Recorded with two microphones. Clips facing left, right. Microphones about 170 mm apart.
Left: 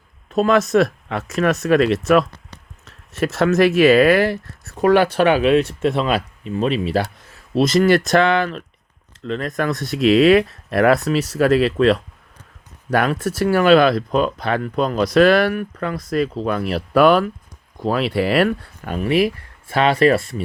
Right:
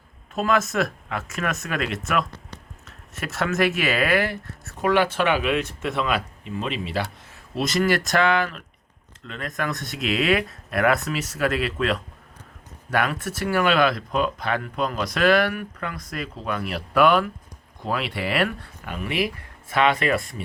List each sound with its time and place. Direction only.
0.3 s speech: 30° left (ahead or behind)
3.3 s speech: 40° left (ahead or behind)